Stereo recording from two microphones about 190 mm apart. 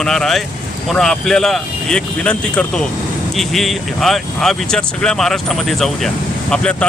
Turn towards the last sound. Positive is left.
turn(degrees=5)  # may be behind; listen again after turning